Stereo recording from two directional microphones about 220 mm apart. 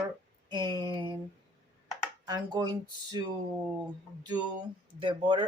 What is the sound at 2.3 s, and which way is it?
Speech, 15° right (ahead or behind).